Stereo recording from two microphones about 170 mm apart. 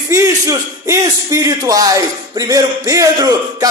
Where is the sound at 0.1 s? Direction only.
15° right (ahead or behind).